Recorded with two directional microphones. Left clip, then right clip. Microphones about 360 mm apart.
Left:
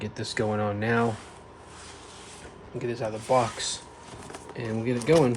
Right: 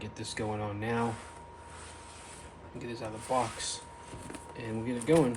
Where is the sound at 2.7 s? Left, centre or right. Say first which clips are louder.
Left 9 dB; left.